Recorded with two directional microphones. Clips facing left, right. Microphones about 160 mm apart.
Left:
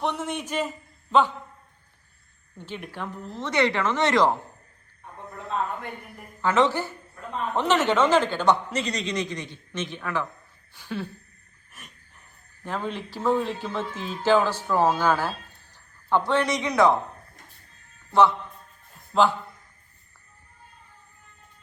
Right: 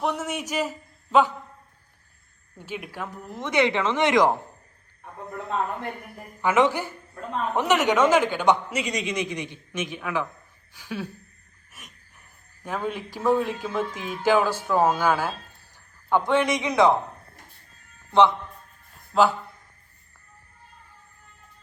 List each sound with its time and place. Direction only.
0.0 s a man's voice: 5° right (ahead or behind)
2.6 s a man's voice: 10° right (ahead or behind)
6.4 s a man's voice: 15° right (ahead or behind)
12.6 s a man's voice: 10° right (ahead or behind)
19.1 s a man's voice: centre (ahead or behind)